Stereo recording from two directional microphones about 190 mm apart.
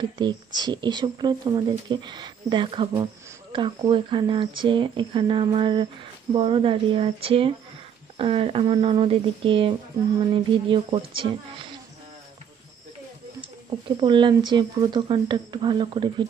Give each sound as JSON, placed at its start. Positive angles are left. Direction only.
{"t": 0.0, "sound": "speech", "side_deg": -25}
{"t": 13.4, "sound": "speech", "side_deg": -25}